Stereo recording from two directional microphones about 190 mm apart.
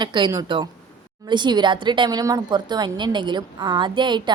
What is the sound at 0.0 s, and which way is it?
Speech, 25° right (ahead or behind).